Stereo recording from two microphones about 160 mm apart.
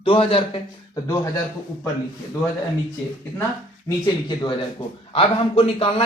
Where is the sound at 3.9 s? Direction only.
25° left (ahead or behind).